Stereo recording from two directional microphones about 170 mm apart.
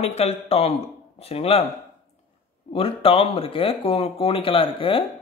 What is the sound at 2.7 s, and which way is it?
Speech, 35° left (ahead or behind).